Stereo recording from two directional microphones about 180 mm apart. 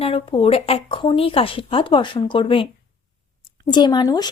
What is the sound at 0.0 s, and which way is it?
A woman's voice, 30° left (ahead or behind).